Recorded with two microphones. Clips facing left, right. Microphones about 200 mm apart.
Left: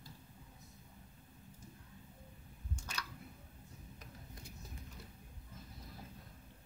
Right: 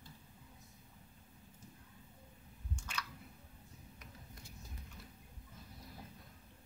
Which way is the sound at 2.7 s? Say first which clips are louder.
Right 1 dB; 40° left (ahead or behind).